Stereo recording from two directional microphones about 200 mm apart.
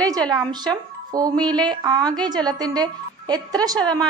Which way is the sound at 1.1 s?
20° right (ahead or behind).